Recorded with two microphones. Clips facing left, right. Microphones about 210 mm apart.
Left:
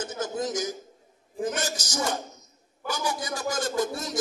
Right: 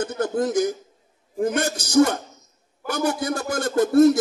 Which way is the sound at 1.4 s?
60° right (ahead or behind).